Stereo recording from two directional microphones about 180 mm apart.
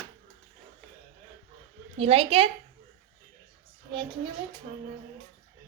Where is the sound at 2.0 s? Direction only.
35° right (ahead or behind).